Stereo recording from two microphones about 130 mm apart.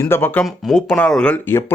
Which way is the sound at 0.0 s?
15° left (ahead or behind).